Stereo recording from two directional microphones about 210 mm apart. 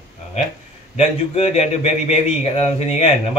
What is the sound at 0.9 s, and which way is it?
Speech, 30° left (ahead or behind).